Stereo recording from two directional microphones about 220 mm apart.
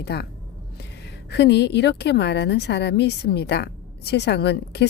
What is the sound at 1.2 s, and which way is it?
A woman's voice, 50° left (ahead or behind).